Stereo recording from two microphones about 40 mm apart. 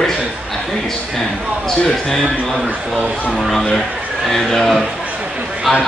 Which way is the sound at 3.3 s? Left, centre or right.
Centre.